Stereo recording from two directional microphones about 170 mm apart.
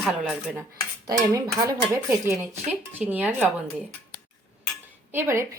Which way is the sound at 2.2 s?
15° right (ahead or behind).